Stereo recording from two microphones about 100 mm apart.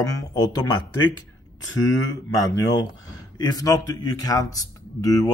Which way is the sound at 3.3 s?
40° left (ahead or behind).